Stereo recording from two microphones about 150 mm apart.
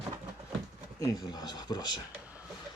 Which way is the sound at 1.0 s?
25° left (ahead or behind).